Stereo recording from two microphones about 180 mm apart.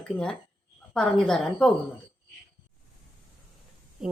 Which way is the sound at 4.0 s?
Centre (ahead or behind).